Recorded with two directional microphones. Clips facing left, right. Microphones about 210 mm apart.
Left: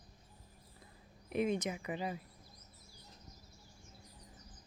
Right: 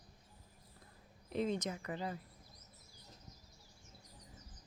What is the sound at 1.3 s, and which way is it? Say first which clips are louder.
Speech: left 3 dB; 15° left (ahead or behind).